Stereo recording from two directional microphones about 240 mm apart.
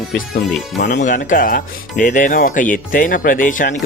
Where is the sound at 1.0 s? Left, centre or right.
Left.